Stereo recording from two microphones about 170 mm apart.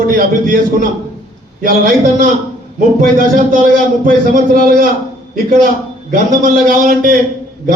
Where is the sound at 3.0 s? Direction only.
55° right (ahead or behind).